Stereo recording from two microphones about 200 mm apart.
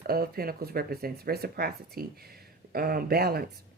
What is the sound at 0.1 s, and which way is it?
Speech, 50° right (ahead or behind).